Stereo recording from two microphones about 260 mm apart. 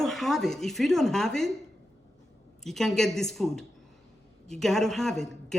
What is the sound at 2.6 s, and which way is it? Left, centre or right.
Speech, centre.